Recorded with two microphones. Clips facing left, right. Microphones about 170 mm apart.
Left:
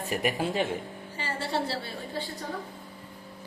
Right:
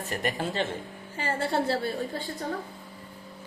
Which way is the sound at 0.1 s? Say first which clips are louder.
Left 2 dB; 10° left (ahead or behind).